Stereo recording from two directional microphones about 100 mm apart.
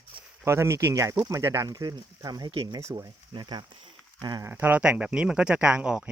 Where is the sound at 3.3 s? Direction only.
50° right (ahead or behind).